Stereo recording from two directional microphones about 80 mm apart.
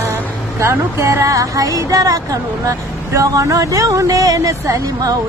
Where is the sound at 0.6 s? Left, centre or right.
Right.